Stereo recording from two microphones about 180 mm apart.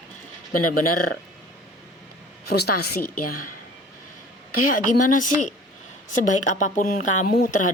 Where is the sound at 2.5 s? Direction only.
60° left (ahead or behind).